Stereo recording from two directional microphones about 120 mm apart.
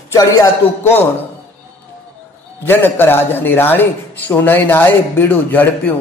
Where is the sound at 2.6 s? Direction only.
20° left (ahead or behind).